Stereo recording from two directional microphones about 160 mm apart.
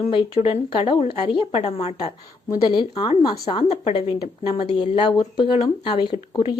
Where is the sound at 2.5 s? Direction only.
25° left (ahead or behind).